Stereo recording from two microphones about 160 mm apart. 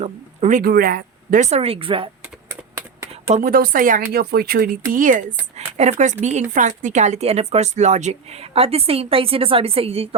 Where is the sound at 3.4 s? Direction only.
60° right (ahead or behind).